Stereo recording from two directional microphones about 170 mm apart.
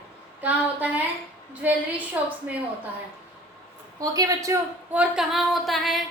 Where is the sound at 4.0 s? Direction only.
20° right (ahead or behind).